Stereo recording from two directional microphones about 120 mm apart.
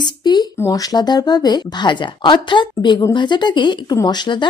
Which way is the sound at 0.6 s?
35° left (ahead or behind).